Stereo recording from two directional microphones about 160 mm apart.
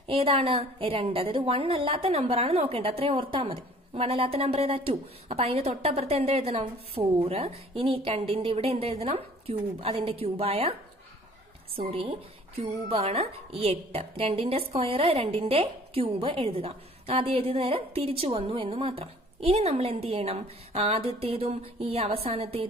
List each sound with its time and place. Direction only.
0.0 s a woman's voice: 35° right (ahead or behind)